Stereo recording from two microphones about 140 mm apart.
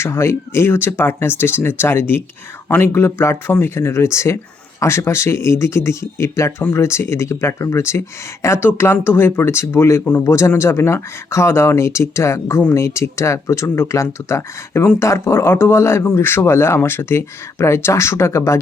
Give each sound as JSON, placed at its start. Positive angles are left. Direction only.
{"t": 0.0, "sound": "speech", "side_deg": 20}